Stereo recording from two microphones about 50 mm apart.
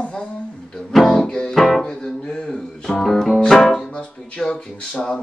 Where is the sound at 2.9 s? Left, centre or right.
Centre.